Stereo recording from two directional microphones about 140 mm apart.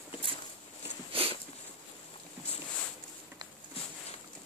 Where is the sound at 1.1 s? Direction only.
40° right (ahead or behind).